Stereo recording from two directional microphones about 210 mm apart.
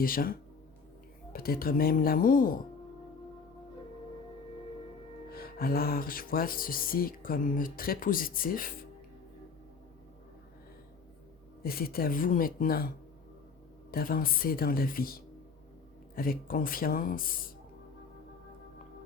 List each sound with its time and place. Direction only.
0.0 s speech: 45° left (ahead or behind)
5.3 s speech: 45° left (ahead or behind)
11.6 s speech: 45° left (ahead or behind)
13.9 s speech: 45° left (ahead or behind)